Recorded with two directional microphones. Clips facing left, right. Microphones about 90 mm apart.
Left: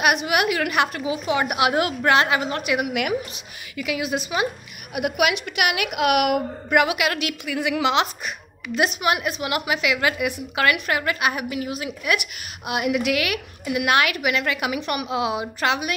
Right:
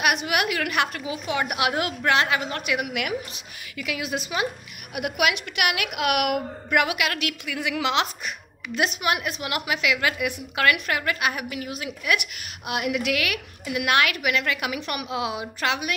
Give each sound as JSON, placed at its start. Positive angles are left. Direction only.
{"t": 0.1, "sound": "a woman's voice", "side_deg": 20}
{"t": 2.9, "sound": "a woman's voice", "side_deg": 30}
{"t": 3.7, "sound": "a woman's voice", "side_deg": 15}